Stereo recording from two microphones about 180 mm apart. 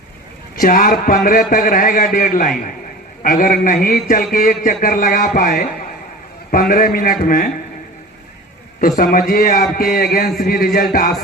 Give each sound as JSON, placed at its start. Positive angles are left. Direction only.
{"t": 0.5, "sound": "a man's voice", "side_deg": 50}
{"t": 9.0, "sound": "a man's voice", "side_deg": 50}